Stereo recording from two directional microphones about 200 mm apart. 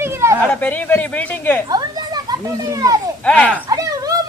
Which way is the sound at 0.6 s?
10° left (ahead or behind).